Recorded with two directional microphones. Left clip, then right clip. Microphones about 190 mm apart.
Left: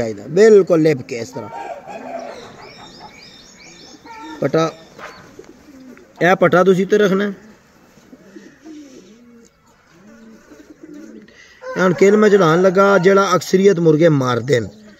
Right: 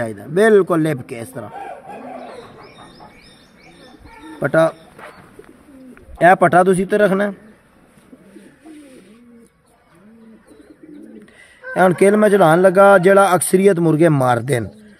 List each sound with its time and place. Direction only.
0.0 s speech: 65° right (ahead or behind)
4.4 s a man's voice: 55° right (ahead or behind)
6.2 s a man's voice: 50° right (ahead or behind)
11.7 s speech: 65° right (ahead or behind)